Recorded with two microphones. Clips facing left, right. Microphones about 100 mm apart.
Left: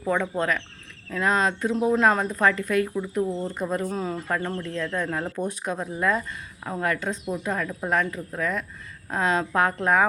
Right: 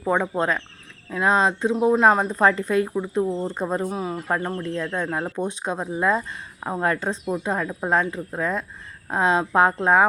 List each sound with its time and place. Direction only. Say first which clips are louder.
0.0 s speech: right 3 dB; 25° right (ahead or behind)
3.8 s speech: right 2 dB; 10° right (ahead or behind); by 10.1 s 25° right (ahead or behind)